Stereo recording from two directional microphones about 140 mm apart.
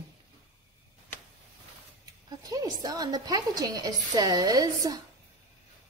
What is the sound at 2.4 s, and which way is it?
Speech, 25° right (ahead or behind).